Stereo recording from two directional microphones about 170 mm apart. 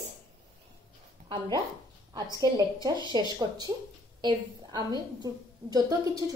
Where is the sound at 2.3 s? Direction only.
20° right (ahead or behind).